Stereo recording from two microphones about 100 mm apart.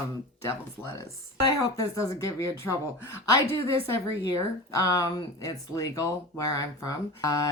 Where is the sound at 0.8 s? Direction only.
30° left (ahead or behind).